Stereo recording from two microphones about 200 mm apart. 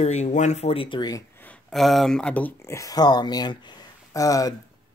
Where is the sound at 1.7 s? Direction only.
Centre (ahead or behind).